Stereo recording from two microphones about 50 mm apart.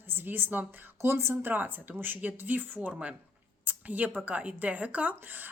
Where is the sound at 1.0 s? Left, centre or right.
Right.